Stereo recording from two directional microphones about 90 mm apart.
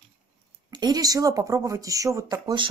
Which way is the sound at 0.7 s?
50° right (ahead or behind).